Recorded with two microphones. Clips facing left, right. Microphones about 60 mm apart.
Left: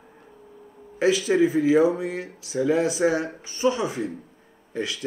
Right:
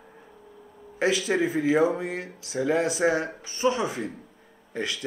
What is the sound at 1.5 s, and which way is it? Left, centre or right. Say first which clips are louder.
Speech: left 1 dB; right.